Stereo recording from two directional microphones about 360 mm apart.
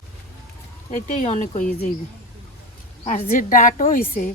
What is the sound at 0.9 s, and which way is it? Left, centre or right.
Speech, centre.